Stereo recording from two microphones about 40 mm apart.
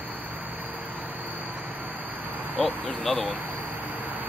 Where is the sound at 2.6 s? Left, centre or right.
Centre.